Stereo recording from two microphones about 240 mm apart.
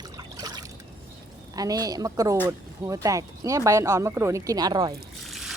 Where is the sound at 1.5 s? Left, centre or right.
Centre.